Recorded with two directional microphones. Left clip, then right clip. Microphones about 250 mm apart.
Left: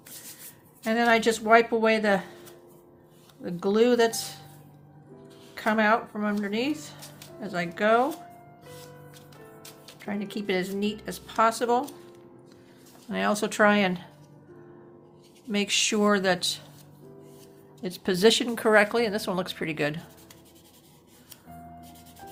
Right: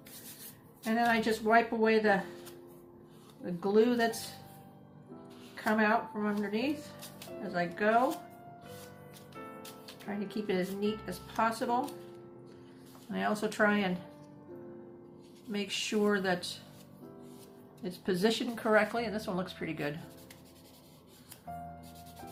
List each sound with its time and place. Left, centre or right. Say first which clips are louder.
0.9 s speech: left 7 dB; left
3.4 s speech: left 5 dB; left
5.5 s speech: left 6 dB; left
10.1 s speech: left 5 dB; left
13.1 s speech: left 6 dB; left
15.5 s speech: left 8 dB; left
17.8 s speech: left 9 dB; left